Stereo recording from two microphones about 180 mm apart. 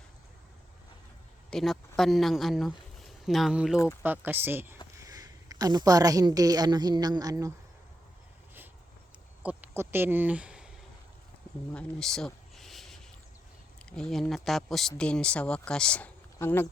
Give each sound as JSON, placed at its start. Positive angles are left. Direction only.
{"t": 1.5, "sound": "a woman's voice", "side_deg": 0}
{"t": 9.4, "sound": "speech", "side_deg": -10}
{"t": 11.7, "sound": "a sound", "side_deg": 5}
{"t": 13.9, "sound": "speech", "side_deg": 0}